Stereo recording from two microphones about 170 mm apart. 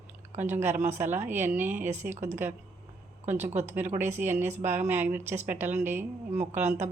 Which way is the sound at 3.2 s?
10° right (ahead or behind).